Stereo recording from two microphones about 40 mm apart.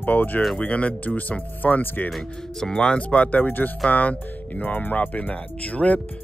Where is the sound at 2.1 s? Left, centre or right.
Centre.